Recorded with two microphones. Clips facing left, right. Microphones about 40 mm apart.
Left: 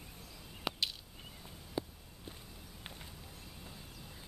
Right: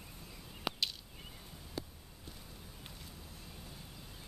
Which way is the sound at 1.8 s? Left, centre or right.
Centre.